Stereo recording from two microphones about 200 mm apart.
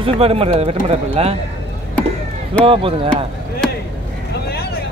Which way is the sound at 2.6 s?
25° right (ahead or behind).